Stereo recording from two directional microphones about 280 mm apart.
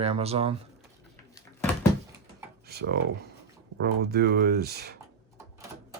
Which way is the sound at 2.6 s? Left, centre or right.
Right.